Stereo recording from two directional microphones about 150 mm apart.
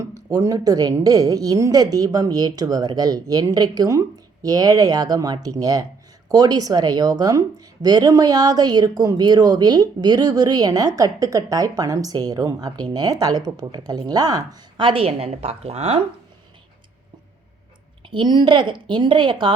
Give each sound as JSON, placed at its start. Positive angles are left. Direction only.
{"t": 0.1, "sound": "speech", "side_deg": -25}
{"t": 18.1, "sound": "a woman's voice", "side_deg": -30}